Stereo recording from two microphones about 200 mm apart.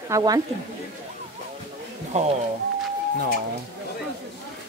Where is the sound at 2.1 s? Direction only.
35° right (ahead or behind).